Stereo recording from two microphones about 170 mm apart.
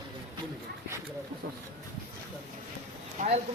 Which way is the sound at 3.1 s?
40° right (ahead or behind).